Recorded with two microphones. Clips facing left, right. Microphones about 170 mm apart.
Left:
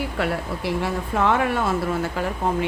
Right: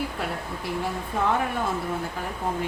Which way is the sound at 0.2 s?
80° left.